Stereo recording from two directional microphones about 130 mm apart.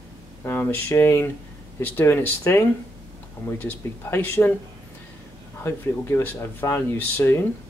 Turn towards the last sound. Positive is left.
turn(degrees=15)  # may be behind; listen again after turning